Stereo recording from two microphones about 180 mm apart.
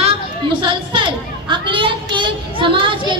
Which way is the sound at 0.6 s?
25° right (ahead or behind).